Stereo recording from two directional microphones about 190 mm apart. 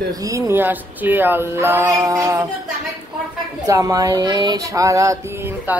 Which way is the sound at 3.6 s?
20° right (ahead or behind).